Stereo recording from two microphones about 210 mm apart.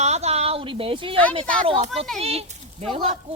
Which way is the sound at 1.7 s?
30° right (ahead or behind).